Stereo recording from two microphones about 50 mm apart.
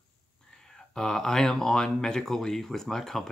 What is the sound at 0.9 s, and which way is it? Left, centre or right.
Speech, centre.